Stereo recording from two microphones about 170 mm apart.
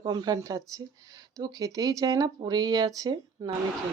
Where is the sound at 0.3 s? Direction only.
25° right (ahead or behind).